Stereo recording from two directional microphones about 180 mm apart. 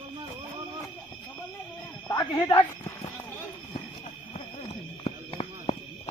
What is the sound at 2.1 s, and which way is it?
Speech, 20° left (ahead or behind).